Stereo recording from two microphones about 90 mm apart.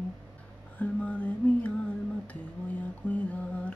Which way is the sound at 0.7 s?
20° left (ahead or behind).